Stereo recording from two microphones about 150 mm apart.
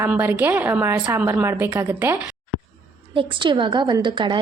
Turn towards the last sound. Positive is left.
turn(degrees=-30)  # may be behind; listen again after turning